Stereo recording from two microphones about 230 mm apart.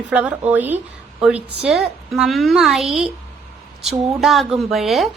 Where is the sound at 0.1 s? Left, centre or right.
Centre.